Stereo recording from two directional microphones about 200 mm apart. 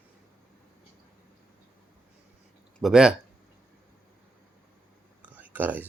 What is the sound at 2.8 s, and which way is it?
Speech, 5° right (ahead or behind).